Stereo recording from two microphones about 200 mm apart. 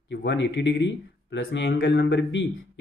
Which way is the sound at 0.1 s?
60° left (ahead or behind).